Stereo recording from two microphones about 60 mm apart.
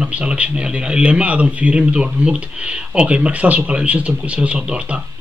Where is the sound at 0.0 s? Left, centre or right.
Centre.